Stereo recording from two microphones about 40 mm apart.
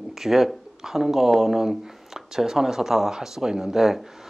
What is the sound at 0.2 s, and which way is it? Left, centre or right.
Speech, centre.